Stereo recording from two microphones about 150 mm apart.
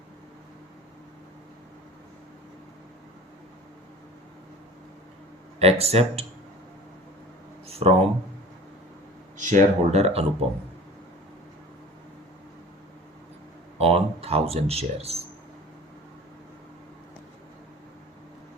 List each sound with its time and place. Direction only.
5.5 s speech: 45° right (ahead or behind)
7.7 s speech: 40° right (ahead or behind)
9.4 s speech: 55° right (ahead or behind)
13.7 s speech: 40° right (ahead or behind)